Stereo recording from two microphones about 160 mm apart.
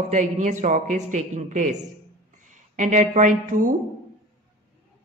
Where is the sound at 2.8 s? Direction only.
50° right (ahead or behind).